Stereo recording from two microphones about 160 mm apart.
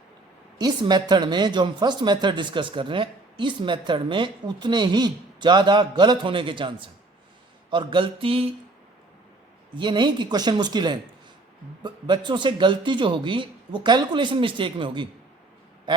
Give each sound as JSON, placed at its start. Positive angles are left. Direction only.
{"t": 0.6, "sound": "speech", "side_deg": -25}
{"t": 7.7, "sound": "mantra", "side_deg": -30}
{"t": 9.7, "sound": "speech", "side_deg": -30}